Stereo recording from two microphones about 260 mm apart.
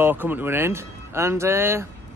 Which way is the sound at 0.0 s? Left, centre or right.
Centre.